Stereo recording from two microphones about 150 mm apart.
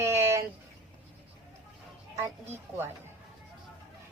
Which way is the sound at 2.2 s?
15° right (ahead or behind).